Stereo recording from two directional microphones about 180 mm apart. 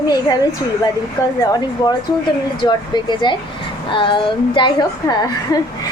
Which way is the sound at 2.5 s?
25° left (ahead or behind).